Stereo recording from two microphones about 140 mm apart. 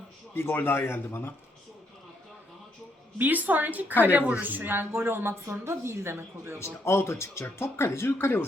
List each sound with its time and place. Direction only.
0.3 s speech: 15° left (ahead or behind)
3.2 s a woman's voice: 10° right (ahead or behind)
6.6 s speech: 20° left (ahead or behind)